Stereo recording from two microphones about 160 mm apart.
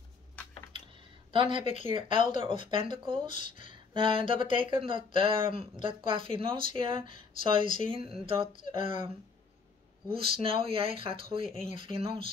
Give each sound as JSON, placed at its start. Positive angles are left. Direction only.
{"t": 0.7, "sound": "speech", "side_deg": -30}
{"t": 10.0, "sound": "speech", "side_deg": -35}